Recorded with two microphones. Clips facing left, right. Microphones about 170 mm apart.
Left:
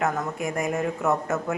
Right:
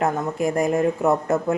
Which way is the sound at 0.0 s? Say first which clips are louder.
Right 5 dB; 30° right (ahead or behind).